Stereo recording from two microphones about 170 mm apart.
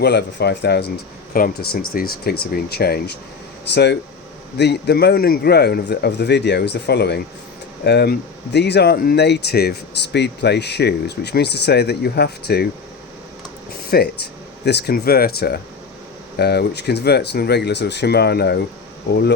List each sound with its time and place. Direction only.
0.0 s speech: 80° left
1.3 s speech: 60° left (ahead or behind)
3.7 s speech: 80° left
13.9 s speech: 65° left (ahead or behind)
14.6 s speech: 85° left